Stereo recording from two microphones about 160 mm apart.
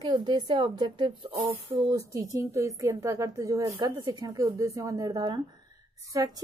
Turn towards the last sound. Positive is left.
turn(degrees=-25)  # may be behind; listen again after turning